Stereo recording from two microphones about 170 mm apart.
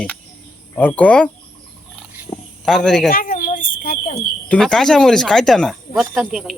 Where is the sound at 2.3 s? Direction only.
30° left (ahead or behind).